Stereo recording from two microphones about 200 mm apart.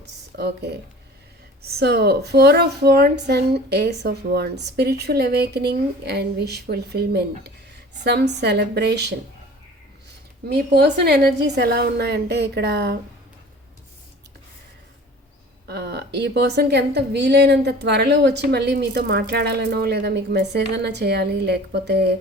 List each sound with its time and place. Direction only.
0.3 s a woman's voice: 55° right (ahead or behind)
10.5 s a woman's voice: 55° right (ahead or behind)
15.6 s a woman's voice: 55° right (ahead or behind)